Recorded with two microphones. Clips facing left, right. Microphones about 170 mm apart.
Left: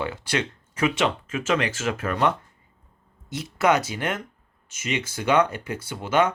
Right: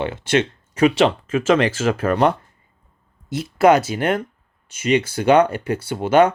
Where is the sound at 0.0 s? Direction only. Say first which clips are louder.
Right 7 dB; 25° right (ahead or behind).